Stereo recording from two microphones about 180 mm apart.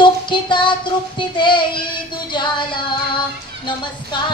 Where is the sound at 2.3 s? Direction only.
25° left (ahead or behind).